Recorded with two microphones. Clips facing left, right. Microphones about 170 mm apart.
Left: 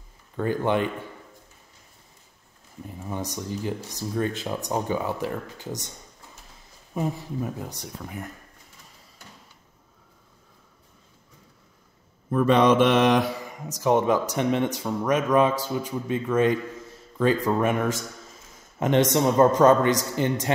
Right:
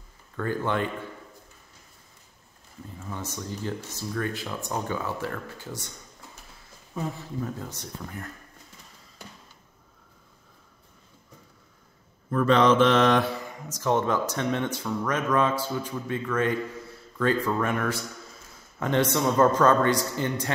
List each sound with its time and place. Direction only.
0.4 s speech: 15° left (ahead or behind)
3.0 s speech: 15° left (ahead or behind)
6.9 s speech: 15° left (ahead or behind)
12.3 s a man's voice: 15° left (ahead or behind)